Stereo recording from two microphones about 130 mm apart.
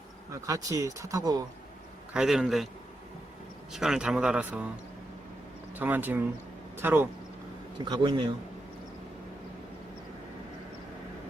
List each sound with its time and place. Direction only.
0.4 s speech: 25° right (ahead or behind)
2.1 s a man's voice: 5° right (ahead or behind)
3.7 s a man's voice: 5° right (ahead or behind)
5.7 s speech: 15° right (ahead or behind)
7.9 s speech: 35° right (ahead or behind)